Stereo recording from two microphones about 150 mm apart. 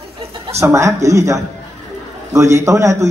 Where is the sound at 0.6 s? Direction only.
20° right (ahead or behind).